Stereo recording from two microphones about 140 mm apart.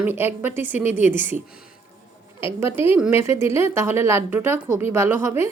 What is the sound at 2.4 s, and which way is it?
Speech, 20° right (ahead or behind).